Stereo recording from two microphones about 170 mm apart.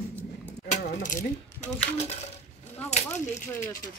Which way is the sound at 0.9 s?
50° left (ahead or behind).